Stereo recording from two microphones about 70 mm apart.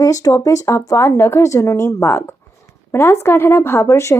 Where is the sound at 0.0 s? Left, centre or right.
Left.